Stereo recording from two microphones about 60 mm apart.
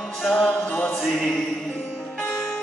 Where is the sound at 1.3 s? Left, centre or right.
Centre.